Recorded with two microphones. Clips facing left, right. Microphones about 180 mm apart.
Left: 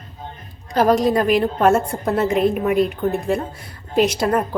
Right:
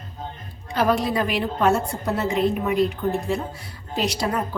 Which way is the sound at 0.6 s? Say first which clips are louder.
Left 5 dB; 40° left (ahead or behind).